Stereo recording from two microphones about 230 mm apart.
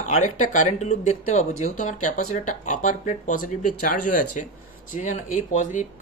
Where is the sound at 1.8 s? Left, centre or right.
Left.